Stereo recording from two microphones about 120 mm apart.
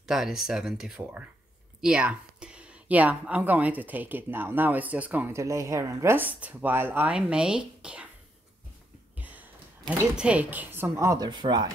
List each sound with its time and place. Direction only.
0.0 s a woman's voice: 5° right (ahead or behind)
9.2 s a woman's voice: 15° right (ahead or behind); by 11.7 s 35° right (ahead or behind)